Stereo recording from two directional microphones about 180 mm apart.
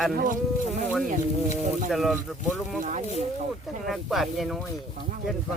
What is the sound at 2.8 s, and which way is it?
Speech, 45° right (ahead or behind).